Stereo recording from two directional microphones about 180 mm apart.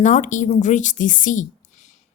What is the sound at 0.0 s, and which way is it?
A woman's voice, 45° left (ahead or behind).